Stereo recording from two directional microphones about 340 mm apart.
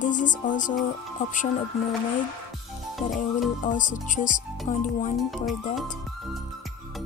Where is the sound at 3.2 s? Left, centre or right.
Left.